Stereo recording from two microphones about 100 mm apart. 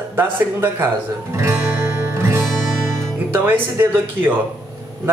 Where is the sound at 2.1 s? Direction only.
25° right (ahead or behind).